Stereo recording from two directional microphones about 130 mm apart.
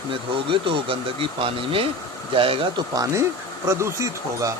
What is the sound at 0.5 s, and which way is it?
Speech, 40° right (ahead or behind).